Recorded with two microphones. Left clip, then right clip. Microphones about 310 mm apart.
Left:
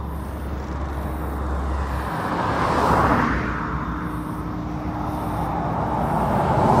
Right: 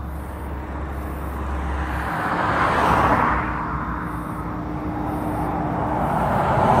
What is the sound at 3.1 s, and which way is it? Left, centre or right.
Music, centre.